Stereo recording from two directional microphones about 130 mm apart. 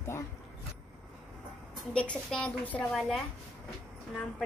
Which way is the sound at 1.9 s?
5° left (ahead or behind).